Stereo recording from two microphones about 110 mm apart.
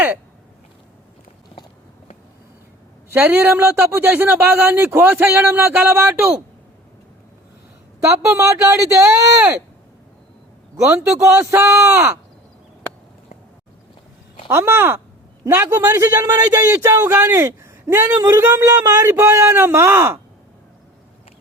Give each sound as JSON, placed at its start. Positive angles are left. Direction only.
{"t": 3.1, "sound": "a man's voice", "side_deg": -20}
{"t": 8.2, "sound": "a man's voice", "side_deg": -25}
{"t": 10.8, "sound": "a man's voice", "side_deg": -25}
{"t": 14.5, "sound": "a man's voice", "side_deg": -20}
{"t": 16.1, "sound": "speech", "side_deg": -35}
{"t": 19.0, "sound": "a man's voice", "side_deg": -20}